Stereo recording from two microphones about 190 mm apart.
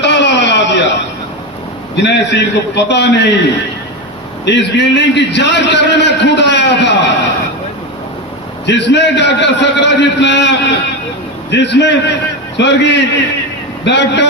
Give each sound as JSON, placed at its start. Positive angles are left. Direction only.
{"t": 0.0, "sound": "a sound", "side_deg": 65}
{"t": 2.0, "sound": "a man's voice", "side_deg": 65}
{"t": 4.4, "sound": "a man's voice", "side_deg": 65}
{"t": 8.6, "sound": "a man's voice", "side_deg": 65}
{"t": 11.5, "sound": "a man's voice", "side_deg": 65}